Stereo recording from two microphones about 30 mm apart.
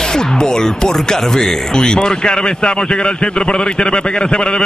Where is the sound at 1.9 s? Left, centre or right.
Left.